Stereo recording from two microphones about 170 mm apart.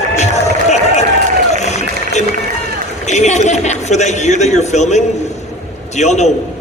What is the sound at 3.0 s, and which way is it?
A woman's voice, 45° left (ahead or behind).